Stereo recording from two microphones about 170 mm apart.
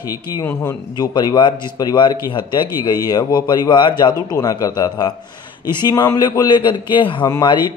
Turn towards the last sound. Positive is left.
turn(degrees=25)  # may be behind; listen again after turning